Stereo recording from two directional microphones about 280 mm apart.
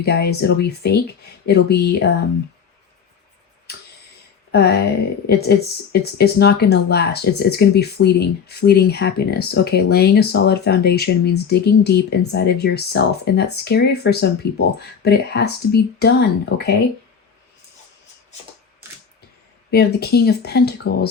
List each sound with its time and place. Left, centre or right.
0.0 s speech: left
4.5 s speech: left
19.7 s speech: left